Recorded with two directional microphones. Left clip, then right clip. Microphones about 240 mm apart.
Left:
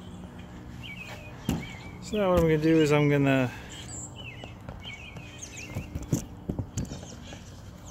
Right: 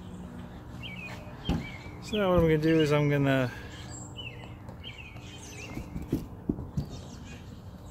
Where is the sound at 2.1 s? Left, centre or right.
Centre.